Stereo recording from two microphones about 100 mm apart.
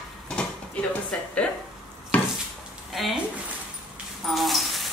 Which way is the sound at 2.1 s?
15° left (ahead or behind).